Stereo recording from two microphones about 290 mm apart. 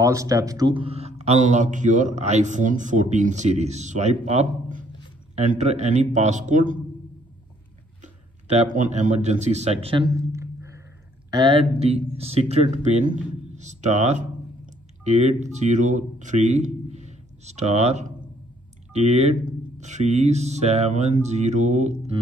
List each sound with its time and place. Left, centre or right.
0.0 s speech: centre; by 6.8 s right
8.0 s speech: right